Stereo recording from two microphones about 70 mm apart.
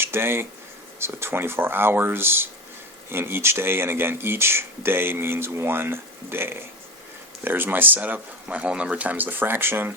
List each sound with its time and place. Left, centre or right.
0.0 s speech: right